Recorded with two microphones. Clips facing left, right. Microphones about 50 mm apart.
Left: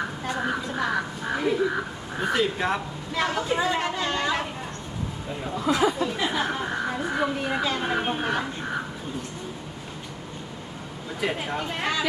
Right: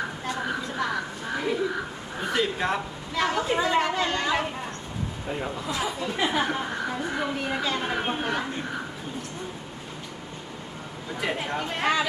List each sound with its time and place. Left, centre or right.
0.3 s a sound: centre
2.2 s a woman's voice: centre
5.6 s speech: left
6.1 s speech: centre
6.7 s a woman's voice: centre
11.2 s a woman's voice: centre